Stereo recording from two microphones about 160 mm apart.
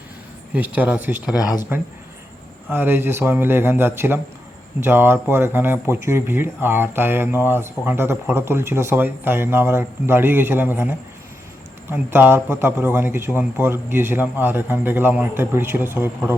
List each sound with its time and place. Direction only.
0.5 s speech: 10° right (ahead or behind)
1.4 s speech: 25° left (ahead or behind)
2.6 s speech: 15° right (ahead or behind)